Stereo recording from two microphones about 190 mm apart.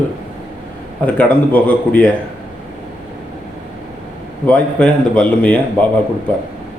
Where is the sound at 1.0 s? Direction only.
5° left (ahead or behind).